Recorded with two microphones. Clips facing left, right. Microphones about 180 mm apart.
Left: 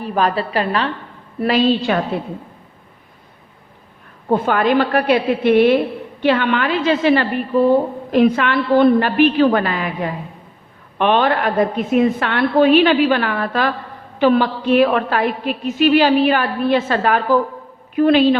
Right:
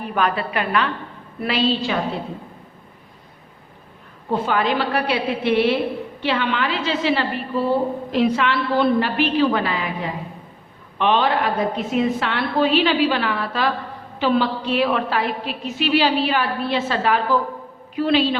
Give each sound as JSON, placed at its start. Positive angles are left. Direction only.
{"t": 0.0, "sound": "a woman's voice", "side_deg": 35}
{"t": 1.4, "sound": "a woman's voice", "side_deg": 45}
{"t": 4.3, "sound": "a woman's voice", "side_deg": 50}